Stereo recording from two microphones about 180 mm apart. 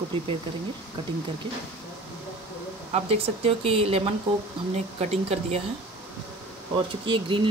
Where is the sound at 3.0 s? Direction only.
35° right (ahead or behind).